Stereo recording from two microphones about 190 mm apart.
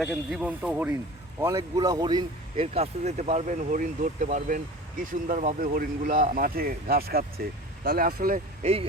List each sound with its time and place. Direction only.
0.0 s speech: centre (ahead or behind); by 8.4 s 50° right (ahead or behind)
8.6 s speech: 30° right (ahead or behind)